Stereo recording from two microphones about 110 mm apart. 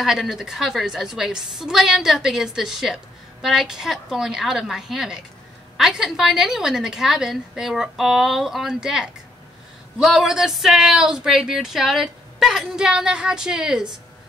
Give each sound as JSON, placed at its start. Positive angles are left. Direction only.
{"t": 0.0, "sound": "speech", "side_deg": -5}